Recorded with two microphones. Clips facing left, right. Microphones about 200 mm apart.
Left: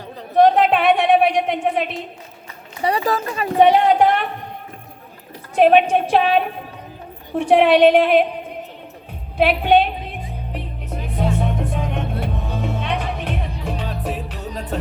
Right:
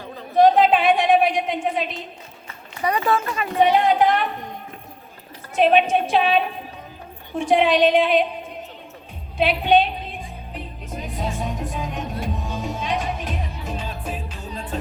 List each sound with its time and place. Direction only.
0.3 s a sound: 65° left (ahead or behind)
2.8 s speech: 35° left (ahead or behind)
3.6 s a woman's voice: 60° left (ahead or behind)
5.5 s a woman's voice: 60° left (ahead or behind)
10.5 s music: 65° left (ahead or behind)